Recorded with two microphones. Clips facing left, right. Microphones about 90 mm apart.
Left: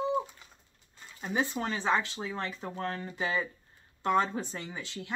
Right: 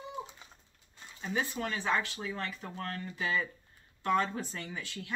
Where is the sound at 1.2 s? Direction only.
25° left (ahead or behind).